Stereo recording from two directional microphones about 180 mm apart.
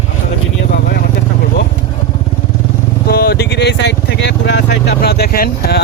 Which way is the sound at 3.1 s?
65° left (ahead or behind).